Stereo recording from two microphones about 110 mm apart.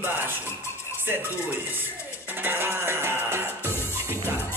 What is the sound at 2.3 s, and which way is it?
Music, 20° right (ahead or behind).